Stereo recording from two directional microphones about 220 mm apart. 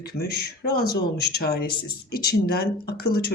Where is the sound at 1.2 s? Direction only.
45° left (ahead or behind).